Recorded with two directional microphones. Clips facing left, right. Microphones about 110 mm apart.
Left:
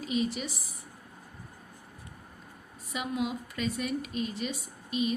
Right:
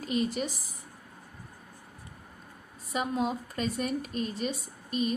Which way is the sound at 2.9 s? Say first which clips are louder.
Right 3 dB; 35° right (ahead or behind).